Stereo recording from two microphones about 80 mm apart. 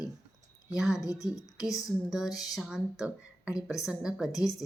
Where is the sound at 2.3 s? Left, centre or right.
Left.